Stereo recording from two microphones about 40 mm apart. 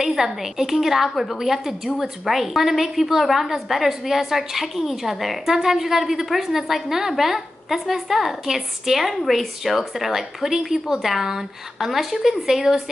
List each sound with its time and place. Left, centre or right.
0.0 s a woman's voice: centre